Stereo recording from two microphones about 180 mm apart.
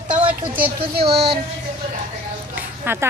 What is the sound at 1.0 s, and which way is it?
Speech, 35° right (ahead or behind).